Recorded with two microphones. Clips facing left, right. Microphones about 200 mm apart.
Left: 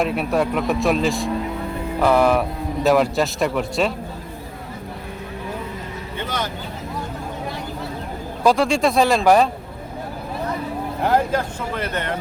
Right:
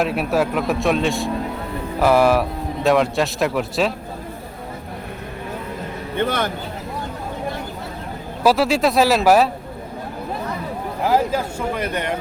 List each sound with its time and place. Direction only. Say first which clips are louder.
0.0 s speech: right 1 dB; centre (ahead or behind)
6.1 s speech: right 6 dB; 55° right (ahead or behind)
8.4 s speech: right 1 dB; 5° right (ahead or behind)
11.0 s speech: right 1 dB; 5° right (ahead or behind)